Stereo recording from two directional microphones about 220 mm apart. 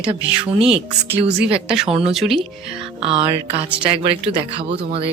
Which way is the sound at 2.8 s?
25° right (ahead or behind).